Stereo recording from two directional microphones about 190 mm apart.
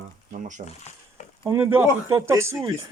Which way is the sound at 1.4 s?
10° right (ahead or behind).